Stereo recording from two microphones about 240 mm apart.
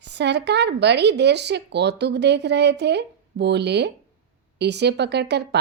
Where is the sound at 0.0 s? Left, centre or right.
Right.